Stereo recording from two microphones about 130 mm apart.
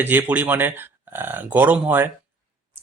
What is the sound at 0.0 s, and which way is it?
Speech, 15° right (ahead or behind).